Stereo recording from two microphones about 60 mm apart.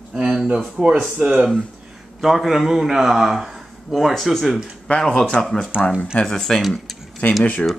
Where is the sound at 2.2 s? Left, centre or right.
Centre.